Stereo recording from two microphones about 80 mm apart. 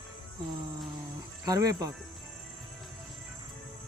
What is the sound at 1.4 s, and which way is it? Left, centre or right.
Speech, right.